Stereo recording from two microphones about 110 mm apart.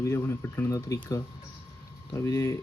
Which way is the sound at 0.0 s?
25° left (ahead or behind).